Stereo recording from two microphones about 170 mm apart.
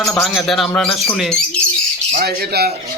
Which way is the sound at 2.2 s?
70° right (ahead or behind).